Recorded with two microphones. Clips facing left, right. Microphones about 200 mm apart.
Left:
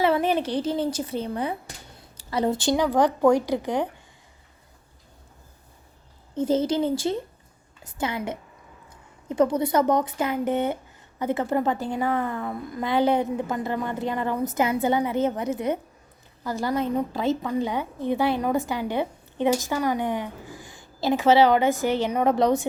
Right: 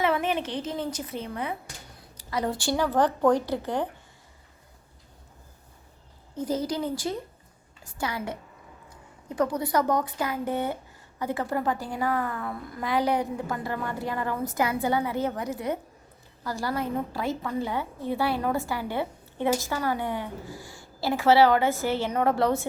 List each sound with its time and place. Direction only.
0.0 s a woman's voice: 35° left (ahead or behind); by 4.0 s 15° left (ahead or behind)
6.3 s a woman's voice: 25° left (ahead or behind)